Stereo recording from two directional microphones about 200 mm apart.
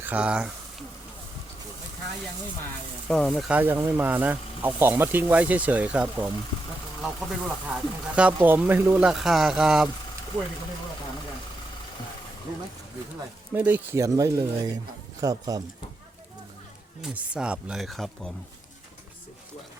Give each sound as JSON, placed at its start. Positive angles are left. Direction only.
{"t": 0.0, "sound": "speech", "side_deg": -5}
{"t": 3.1, "sound": "speech", "side_deg": 5}
{"t": 13.5, "sound": "speech", "side_deg": -10}
{"t": 17.0, "sound": "speech", "side_deg": -5}